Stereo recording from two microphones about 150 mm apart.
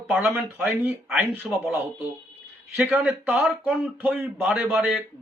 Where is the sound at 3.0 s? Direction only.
10° right (ahead or behind).